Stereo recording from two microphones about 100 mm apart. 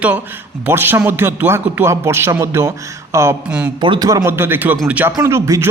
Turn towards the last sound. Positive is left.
turn(degrees=-30)  # may be behind; listen again after turning